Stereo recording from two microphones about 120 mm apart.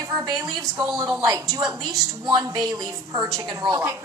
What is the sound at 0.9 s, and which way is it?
A woman's voice, 30° right (ahead or behind).